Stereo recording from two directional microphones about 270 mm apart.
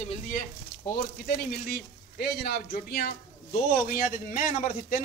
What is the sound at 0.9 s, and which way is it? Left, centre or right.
A man's voice, left.